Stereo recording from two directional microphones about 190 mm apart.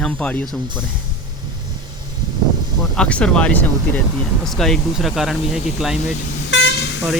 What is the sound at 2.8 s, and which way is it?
Speech, 5° left (ahead or behind).